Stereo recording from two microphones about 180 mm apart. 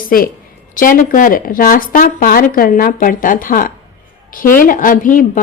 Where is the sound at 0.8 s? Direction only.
50° left (ahead or behind).